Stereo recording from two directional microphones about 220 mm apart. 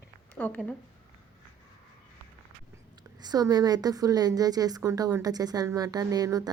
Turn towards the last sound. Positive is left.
turn(degrees=-15)  # may be behind; listen again after turning